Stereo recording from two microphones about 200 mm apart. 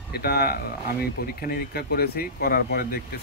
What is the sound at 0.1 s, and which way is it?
Speech, 50° left (ahead or behind).